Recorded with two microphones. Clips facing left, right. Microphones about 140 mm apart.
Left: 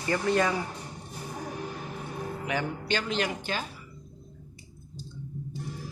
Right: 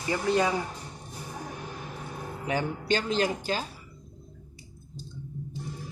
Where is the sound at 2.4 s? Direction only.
35° right (ahead or behind).